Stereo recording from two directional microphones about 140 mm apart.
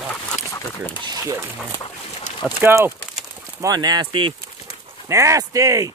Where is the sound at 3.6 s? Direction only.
30° right (ahead or behind).